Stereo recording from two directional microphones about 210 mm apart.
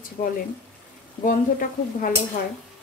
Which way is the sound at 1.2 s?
40° left (ahead or behind).